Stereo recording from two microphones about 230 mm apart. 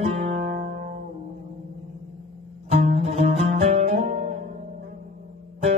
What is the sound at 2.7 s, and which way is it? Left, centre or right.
Music, right.